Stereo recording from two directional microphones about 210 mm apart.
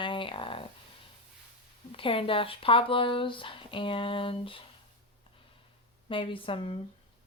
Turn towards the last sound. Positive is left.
turn(degrees=25)  # may be behind; listen again after turning